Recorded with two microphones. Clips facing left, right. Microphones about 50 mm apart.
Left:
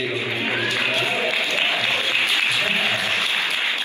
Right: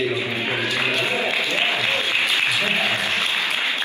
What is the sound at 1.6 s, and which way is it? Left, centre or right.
Applause, right.